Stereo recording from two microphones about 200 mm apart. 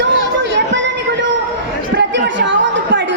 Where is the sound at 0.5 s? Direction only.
65° right (ahead or behind).